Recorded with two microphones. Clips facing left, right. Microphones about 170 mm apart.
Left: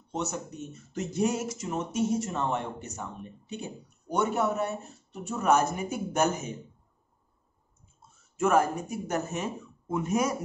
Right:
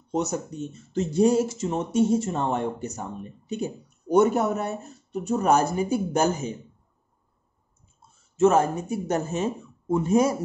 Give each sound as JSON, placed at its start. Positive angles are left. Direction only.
{"t": 0.1, "sound": "speech", "side_deg": -35}
{"t": 8.4, "sound": "speech", "side_deg": -25}